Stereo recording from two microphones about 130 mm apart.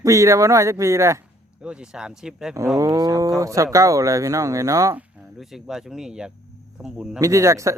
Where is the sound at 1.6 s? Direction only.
5° right (ahead or behind).